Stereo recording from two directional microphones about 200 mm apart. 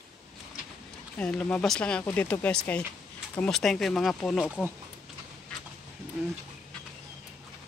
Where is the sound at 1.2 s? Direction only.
5° left (ahead or behind).